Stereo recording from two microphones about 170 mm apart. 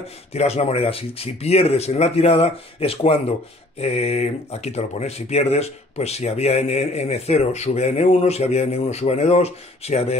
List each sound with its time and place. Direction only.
0.3 s speech: 40° left (ahead or behind)